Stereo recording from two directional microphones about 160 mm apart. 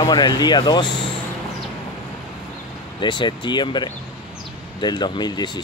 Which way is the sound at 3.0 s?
30° left (ahead or behind).